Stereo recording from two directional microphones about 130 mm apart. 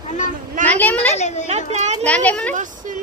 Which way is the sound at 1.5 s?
55° right (ahead or behind).